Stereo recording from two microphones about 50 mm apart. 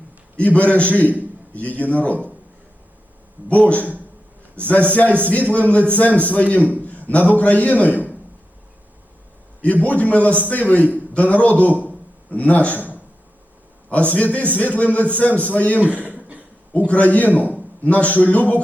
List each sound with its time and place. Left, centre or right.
0.3 s a man's voice: left
3.5 s a man's voice: left
9.8 s a man's voice: left
11.9 s a sound: left
13.9 s a man's voice: left
15.8 s chuckle: right
16.7 s speech: left